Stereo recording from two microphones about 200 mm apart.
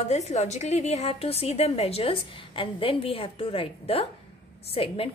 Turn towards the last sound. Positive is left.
turn(degrees=30)  # may be behind; listen again after turning